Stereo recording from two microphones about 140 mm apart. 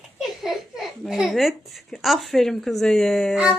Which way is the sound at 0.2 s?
Centre (ahead or behind).